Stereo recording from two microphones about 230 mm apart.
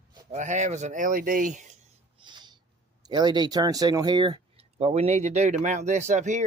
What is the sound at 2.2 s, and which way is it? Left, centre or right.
Owl, centre.